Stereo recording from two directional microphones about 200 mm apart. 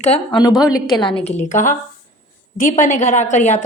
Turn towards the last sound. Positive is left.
turn(degrees=35)  # may be behind; listen again after turning